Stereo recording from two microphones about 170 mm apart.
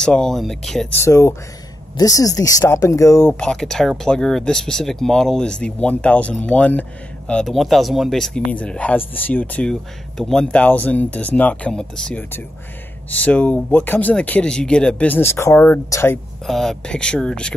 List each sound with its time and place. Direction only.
0.0 s speech: 5° left (ahead or behind)
0.9 s speech: 15° left (ahead or behind)
16.4 s speech: centre (ahead or behind)